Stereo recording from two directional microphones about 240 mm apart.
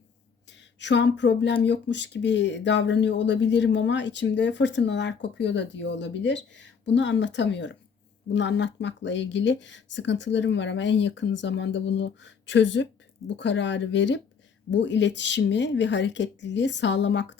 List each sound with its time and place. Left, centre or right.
0.8 s speech: left